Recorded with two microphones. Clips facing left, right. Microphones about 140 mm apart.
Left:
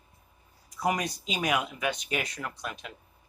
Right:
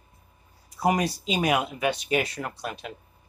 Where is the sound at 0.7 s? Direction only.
30° right (ahead or behind).